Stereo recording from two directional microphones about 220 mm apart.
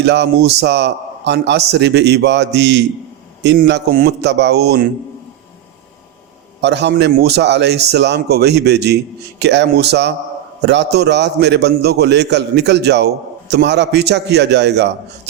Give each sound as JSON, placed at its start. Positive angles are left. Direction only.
{"t": 0.0, "sound": "a man's voice", "side_deg": -50}
{"t": 6.6, "sound": "a man's voice", "side_deg": -50}